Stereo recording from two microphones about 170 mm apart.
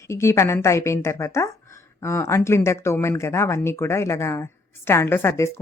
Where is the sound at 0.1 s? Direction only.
15° left (ahead or behind).